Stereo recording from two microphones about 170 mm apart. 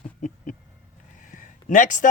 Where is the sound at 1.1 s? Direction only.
50° left (ahead or behind).